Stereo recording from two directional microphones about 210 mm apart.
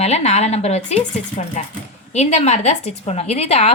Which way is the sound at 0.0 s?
30° left (ahead or behind).